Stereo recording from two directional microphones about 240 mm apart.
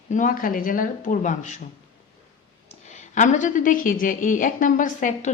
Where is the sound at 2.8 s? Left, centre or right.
Left.